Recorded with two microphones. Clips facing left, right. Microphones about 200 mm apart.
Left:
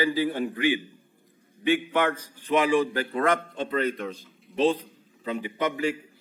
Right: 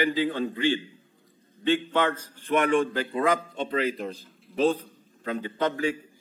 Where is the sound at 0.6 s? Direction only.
10° left (ahead or behind).